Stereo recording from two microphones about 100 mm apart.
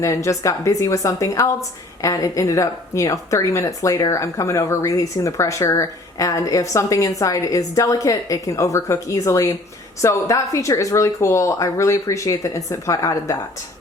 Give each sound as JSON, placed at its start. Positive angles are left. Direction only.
{"t": 0.0, "sound": "speech", "side_deg": 30}